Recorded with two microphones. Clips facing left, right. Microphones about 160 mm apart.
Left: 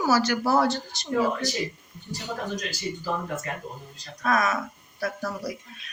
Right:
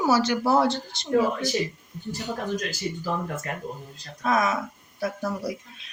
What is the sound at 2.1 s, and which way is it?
Speech, 50° right (ahead or behind).